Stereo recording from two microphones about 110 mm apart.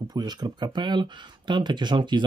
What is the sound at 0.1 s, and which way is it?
Speech, 40° right (ahead or behind).